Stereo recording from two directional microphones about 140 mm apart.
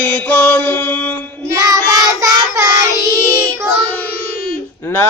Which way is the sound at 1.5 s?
25° right (ahead or behind).